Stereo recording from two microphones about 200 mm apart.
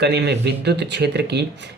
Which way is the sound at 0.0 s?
55° right (ahead or behind).